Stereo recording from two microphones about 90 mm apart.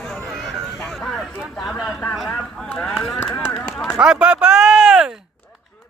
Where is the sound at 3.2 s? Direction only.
5° left (ahead or behind).